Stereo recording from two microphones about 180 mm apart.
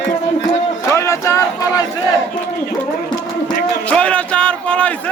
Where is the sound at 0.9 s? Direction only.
15° left (ahead or behind).